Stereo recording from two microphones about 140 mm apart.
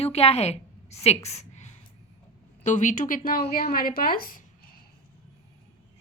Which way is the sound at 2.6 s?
60° left (ahead or behind).